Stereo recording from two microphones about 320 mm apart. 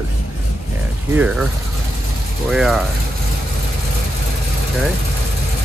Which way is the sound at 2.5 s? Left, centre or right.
Centre.